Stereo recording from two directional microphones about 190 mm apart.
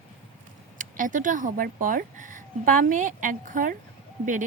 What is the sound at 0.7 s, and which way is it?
A woman's voice, 45° right (ahead or behind).